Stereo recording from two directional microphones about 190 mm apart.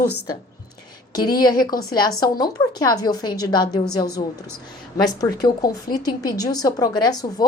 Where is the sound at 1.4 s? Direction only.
20° left (ahead or behind).